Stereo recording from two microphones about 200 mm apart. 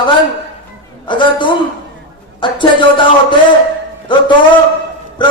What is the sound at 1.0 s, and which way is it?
Music, 25° left (ahead or behind).